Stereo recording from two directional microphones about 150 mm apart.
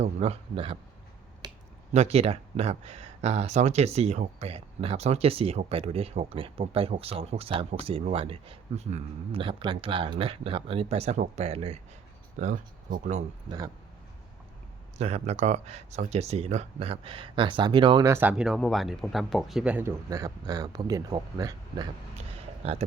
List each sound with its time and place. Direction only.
0.0 s speech: 45° right (ahead or behind)
1.4 s finger snapping: 30° right (ahead or behind)
1.9 s speech: 45° right (ahead or behind)
9.4 s speech: 35° right (ahead or behind); by 13.2 s 55° right (ahead or behind)
14.9 s speech: 45° right (ahead or behind)
18.0 s speech: 15° right (ahead or behind)
22.4 s a sound: 40° right (ahead or behind)